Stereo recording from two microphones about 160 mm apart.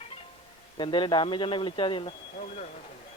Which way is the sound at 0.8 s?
30° left (ahead or behind).